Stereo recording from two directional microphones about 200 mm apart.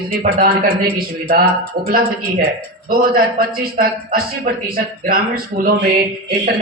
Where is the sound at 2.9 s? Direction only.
45° right (ahead or behind).